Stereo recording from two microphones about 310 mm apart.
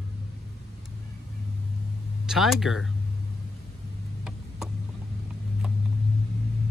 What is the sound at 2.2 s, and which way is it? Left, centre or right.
Speech, centre.